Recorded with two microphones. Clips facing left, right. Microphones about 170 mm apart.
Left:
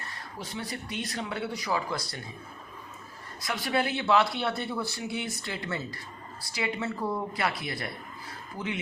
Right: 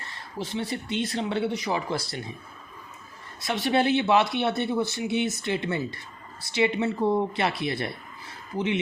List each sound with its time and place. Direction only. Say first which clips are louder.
0.3 s speech: right 7 dB; 25° right (ahead or behind)
3.4 s speech: right 6 dB; 25° right (ahead or behind)